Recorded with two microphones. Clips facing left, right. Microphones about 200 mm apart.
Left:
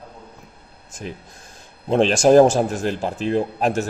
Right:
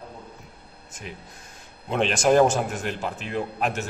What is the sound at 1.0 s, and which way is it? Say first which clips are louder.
Speech: left 6 dB; 35° left (ahead or behind).